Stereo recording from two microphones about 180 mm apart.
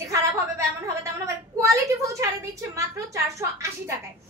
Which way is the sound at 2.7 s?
15° right (ahead or behind).